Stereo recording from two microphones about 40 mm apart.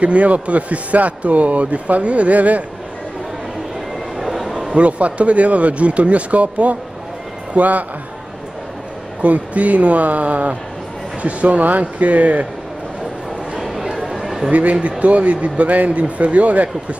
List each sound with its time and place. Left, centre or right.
0.0 s a man's voice: right
4.2 s a sound: centre
4.6 s a man's voice: right
9.2 s a man's voice: right
13.6 s chatter: centre
14.5 s a man's voice: right